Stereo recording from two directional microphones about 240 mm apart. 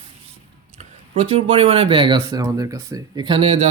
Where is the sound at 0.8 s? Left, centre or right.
Right.